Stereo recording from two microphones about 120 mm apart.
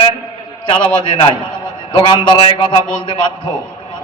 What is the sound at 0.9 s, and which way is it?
A man's voice, 40° left (ahead or behind).